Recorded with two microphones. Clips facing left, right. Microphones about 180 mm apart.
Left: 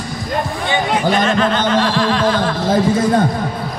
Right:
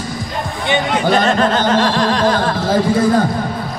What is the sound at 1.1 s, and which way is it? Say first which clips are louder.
Speech: right 3 dB; 40° right (ahead or behind).